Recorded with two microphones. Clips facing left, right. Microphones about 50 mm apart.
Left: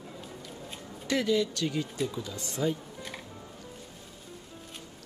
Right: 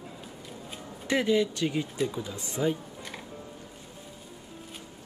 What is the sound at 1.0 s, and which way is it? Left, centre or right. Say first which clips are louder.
Speech: right 2 dB; right.